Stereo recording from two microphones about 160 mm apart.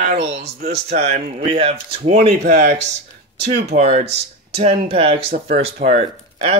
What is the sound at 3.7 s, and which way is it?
Speech, 40° right (ahead or behind).